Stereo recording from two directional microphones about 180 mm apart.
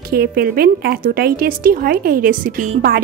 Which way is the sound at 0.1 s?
55° right (ahead or behind).